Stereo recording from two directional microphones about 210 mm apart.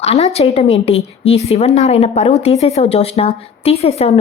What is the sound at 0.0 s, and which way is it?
A woman's voice, 30° left (ahead or behind).